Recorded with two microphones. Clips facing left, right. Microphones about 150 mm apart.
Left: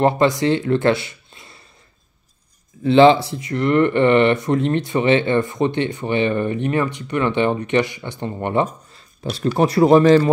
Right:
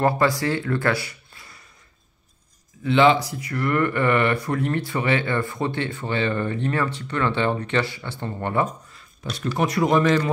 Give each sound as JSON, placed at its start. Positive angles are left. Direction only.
{"t": 0.0, "sound": "speech", "side_deg": 20}
{"t": 2.8, "sound": "speech", "side_deg": 30}